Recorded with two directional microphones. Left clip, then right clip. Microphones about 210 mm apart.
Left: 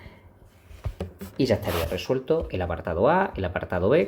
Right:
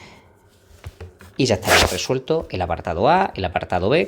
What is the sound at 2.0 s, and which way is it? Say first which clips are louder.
Speech: right 3 dB; 25° right (ahead or behind).